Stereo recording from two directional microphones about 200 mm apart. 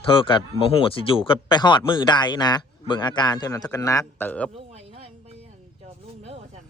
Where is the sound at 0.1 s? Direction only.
25° left (ahead or behind); by 4.5 s 5° left (ahead or behind).